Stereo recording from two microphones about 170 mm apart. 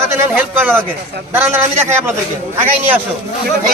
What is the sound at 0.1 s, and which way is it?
Speech, 10° right (ahead or behind).